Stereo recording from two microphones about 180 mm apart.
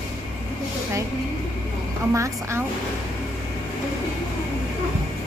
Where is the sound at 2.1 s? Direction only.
15° right (ahead or behind).